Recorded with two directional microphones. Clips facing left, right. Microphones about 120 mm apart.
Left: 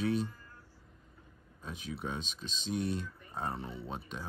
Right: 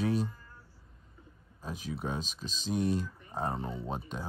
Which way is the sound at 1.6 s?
40° right (ahead or behind).